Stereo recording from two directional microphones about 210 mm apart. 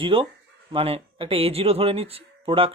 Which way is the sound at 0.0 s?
25° right (ahead or behind).